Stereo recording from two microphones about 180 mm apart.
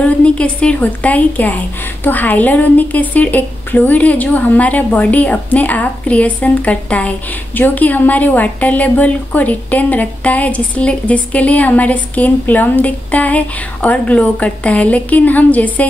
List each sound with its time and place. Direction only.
0.0 s a woman's voice: 5° left (ahead or behind)